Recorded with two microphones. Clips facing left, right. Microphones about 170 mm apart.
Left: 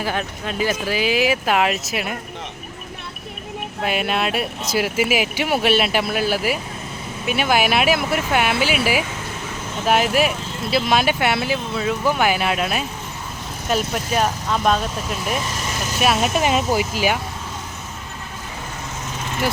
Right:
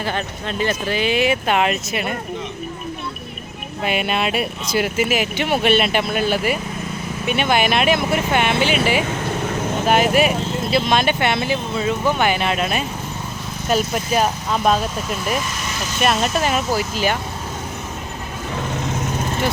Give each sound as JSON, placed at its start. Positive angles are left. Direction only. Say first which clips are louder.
{"t": 0.0, "sound": "speech", "louder": "even", "side_deg": 5}
{"t": 3.8, "sound": "speech", "louder": "right 1 dB", "side_deg": 0}
{"t": 16.0, "sound": "speech", "louder": "even", "side_deg": 5}
{"t": 16.3, "sound": "speech", "louder": "left 1 dB", "side_deg": 15}